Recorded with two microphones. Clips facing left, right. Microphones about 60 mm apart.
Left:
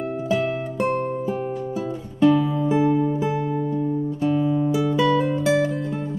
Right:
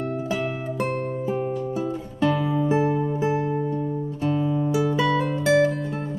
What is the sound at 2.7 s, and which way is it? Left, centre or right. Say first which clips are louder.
Music: left 5 dB; right.